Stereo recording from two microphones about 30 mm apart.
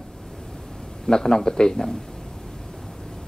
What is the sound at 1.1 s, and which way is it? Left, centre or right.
Speech, left.